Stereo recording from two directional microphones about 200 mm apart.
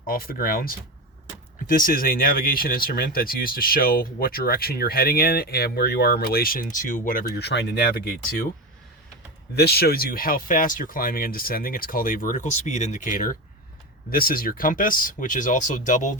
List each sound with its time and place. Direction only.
0.1 s speech: 45° left (ahead or behind)
9.6 s speech: 50° left (ahead or behind)